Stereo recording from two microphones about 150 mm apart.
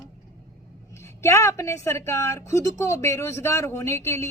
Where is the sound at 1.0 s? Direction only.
20° left (ahead or behind).